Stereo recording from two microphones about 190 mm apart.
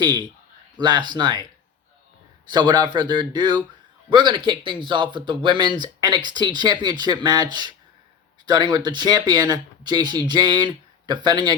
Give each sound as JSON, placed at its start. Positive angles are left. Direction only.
{"t": 0.0, "sound": "speech", "side_deg": -25}
{"t": 2.5, "sound": "speech", "side_deg": -20}